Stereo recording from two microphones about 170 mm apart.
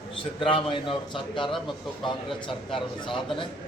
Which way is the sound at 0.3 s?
30° left (ahead or behind).